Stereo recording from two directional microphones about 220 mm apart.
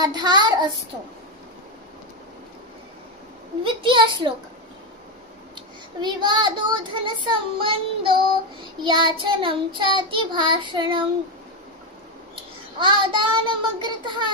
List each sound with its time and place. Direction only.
0.0 s child singing: 20° right (ahead or behind)
3.6 s child singing: 20° right (ahead or behind)
5.9 s child singing: 20° right (ahead or behind)
12.7 s child singing: 20° right (ahead or behind)